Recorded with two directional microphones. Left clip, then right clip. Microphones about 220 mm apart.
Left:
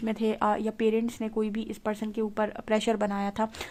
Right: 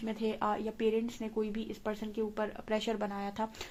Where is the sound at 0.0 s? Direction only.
40° left (ahead or behind).